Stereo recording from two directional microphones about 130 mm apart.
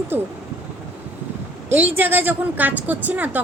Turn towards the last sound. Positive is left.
turn(degrees=-15)  # may be behind; listen again after turning